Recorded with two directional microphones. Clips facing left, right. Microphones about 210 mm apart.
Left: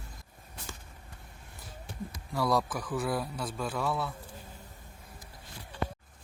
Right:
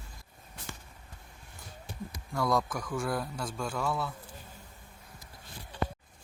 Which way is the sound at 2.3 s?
Centre (ahead or behind).